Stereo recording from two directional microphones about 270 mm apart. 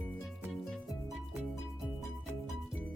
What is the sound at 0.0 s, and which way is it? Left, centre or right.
Music, centre.